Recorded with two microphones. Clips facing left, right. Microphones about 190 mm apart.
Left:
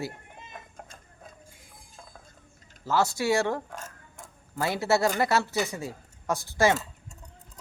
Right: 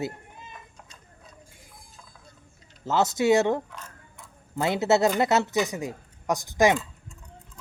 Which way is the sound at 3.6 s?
45° left (ahead or behind).